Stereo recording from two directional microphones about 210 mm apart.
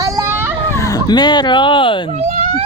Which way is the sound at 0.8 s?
15° left (ahead or behind).